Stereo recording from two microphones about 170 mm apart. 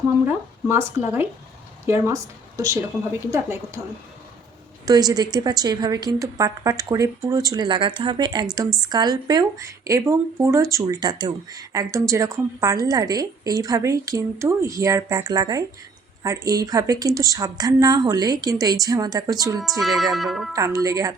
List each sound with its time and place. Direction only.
0.3 s a woman's voice: 15° right (ahead or behind)
4.9 s speech: 25° right (ahead or behind)
19.8 s speech: centre (ahead or behind)
20.6 s speech: 20° right (ahead or behind)